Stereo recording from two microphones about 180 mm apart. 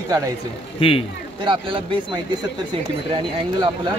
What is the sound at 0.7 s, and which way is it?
Speech, 30° left (ahead or behind).